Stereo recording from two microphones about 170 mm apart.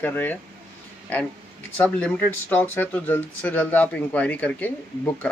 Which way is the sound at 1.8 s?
5° left (ahead or behind).